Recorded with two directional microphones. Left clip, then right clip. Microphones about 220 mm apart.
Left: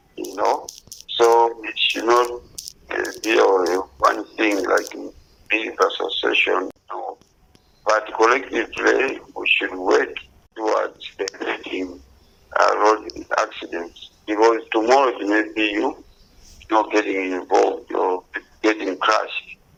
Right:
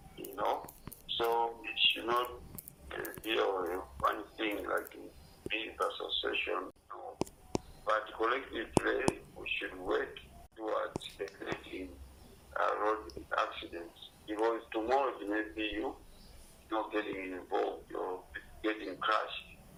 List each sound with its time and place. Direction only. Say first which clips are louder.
0.2 s a sound: left 14 dB; 40° left (ahead or behind)
1.1 s speech: left 17 dB; 40° left (ahead or behind)
2.9 s radio: left 16 dB; 40° left (ahead or behind)
5.5 s speech: left 16 dB; 40° left (ahead or behind)
7.9 s radio: left 16 dB; 40° left (ahead or behind)
12.5 s frog: left 16 dB; 40° left (ahead or behind)
13.2 s a sound: left 12 dB; 40° left (ahead or behind)
14.3 s radio: left 17 dB; 40° left (ahead or behind)
16.6 s a sound: left 17 dB; 40° left (ahead or behind)